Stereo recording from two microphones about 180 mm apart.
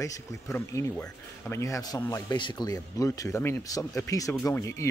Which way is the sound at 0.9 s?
5° left (ahead or behind).